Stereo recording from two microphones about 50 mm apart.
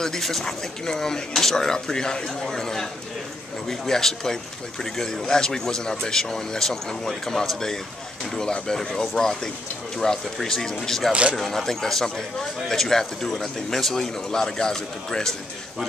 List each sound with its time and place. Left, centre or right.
0.0 s speech: centre
11.1 s speech: right
11.3 s speech: centre